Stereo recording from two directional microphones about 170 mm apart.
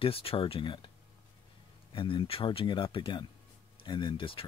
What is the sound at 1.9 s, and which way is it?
Speech, 30° left (ahead or behind).